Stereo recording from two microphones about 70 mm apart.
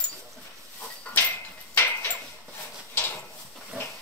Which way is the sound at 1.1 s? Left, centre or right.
Left.